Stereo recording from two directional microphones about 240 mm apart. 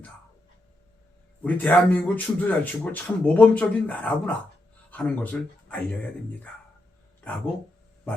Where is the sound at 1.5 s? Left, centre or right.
Centre.